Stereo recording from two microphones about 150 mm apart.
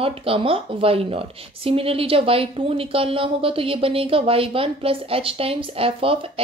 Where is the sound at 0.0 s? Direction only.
40° right (ahead or behind).